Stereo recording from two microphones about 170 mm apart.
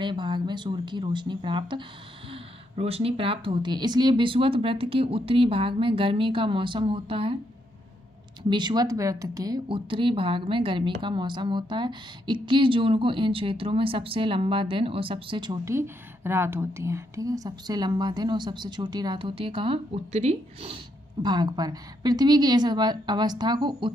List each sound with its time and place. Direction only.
0.0 s speech: 25° right (ahead or behind)
8.5 s speech: 25° right (ahead or behind)